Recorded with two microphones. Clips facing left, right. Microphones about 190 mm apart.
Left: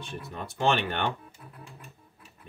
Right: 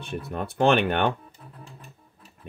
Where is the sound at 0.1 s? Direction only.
60° right (ahead or behind).